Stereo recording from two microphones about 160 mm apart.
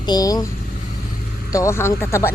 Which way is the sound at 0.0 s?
25° left (ahead or behind).